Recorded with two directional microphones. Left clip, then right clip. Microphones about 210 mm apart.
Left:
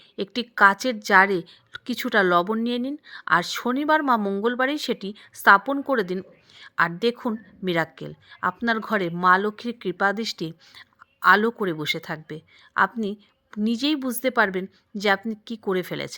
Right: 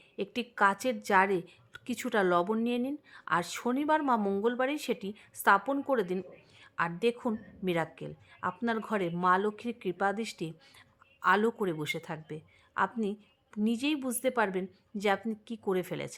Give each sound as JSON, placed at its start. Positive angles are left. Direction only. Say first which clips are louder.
{"t": 0.2, "sound": "speech", "louder": "left 10 dB", "side_deg": 15}